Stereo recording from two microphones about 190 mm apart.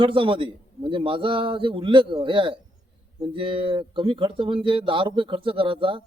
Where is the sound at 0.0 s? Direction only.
25° right (ahead or behind).